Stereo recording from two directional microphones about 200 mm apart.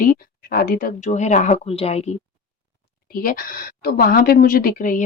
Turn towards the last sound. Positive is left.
turn(degrees=40)  # may be behind; listen again after turning